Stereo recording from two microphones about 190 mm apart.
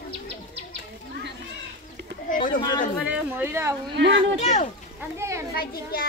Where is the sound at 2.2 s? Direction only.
45° left (ahead or behind).